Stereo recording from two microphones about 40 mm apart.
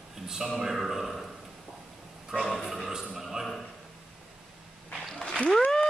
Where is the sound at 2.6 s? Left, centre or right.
Centre.